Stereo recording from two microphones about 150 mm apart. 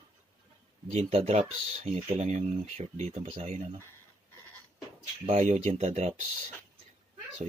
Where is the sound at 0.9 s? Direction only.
45° right (ahead or behind).